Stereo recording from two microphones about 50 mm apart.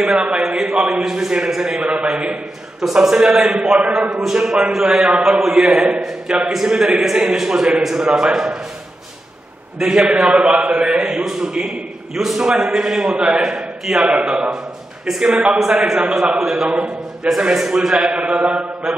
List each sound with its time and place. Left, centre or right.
0.4 s a man's voice: centre
1.8 s mantra: right
2.8 s a man's voice: centre
3.8 s mantra: right
4.1 s a man's voice: centre
5.6 s mantra: centre
6.5 s a man's voice: centre
9.8 s a man's voice: centre
10.0 s mantra: centre
10.6 s a man's voice: right
15.0 s a man's voice: centre
17.9 s mantra: right